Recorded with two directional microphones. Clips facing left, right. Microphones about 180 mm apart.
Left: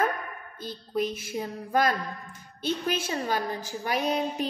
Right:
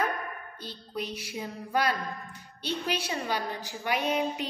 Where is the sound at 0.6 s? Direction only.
45° left (ahead or behind).